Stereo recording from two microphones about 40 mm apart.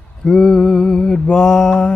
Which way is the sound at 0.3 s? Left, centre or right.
Centre.